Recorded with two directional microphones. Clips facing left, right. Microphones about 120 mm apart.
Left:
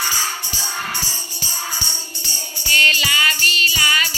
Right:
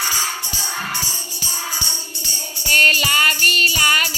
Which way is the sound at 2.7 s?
45° right (ahead or behind).